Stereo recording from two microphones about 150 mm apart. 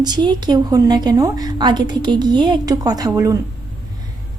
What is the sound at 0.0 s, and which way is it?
A woman's voice, 30° right (ahead or behind).